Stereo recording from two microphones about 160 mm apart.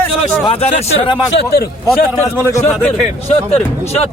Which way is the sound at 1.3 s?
75° left (ahead or behind).